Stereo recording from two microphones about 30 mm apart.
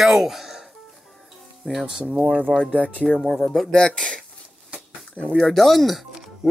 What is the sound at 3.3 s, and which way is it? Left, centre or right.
Speech, left.